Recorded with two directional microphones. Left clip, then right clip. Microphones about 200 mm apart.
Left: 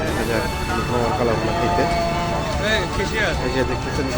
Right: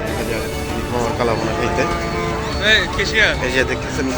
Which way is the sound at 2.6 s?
60° left (ahead or behind).